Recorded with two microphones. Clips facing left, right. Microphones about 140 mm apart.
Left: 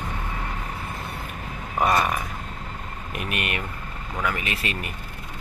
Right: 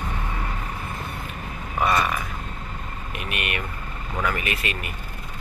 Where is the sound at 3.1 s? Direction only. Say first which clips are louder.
Left 1 dB; 40° left (ahead or behind).